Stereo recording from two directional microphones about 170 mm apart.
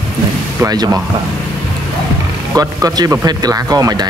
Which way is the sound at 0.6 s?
20° right (ahead or behind).